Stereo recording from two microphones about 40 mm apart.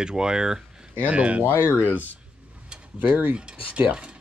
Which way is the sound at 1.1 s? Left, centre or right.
Right.